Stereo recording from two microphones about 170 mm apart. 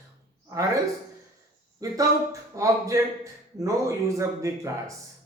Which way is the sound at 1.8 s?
20° right (ahead or behind).